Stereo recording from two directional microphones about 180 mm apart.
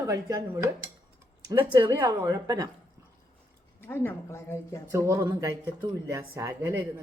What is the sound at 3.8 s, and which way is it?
Speech, 10° left (ahead or behind).